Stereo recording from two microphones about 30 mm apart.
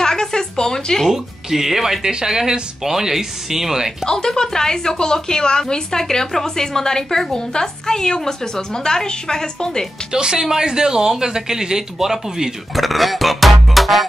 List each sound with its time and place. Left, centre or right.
0.0 s a sound: centre
1.0 s speech: centre
2.0 s speech: right
4.0 s a woman's voice: left
10.1 s speech: right
12.7 s music: centre